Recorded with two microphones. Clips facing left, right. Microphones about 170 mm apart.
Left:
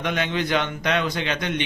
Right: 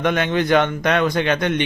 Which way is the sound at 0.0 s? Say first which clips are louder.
Right 6 dB; 55° right (ahead or behind).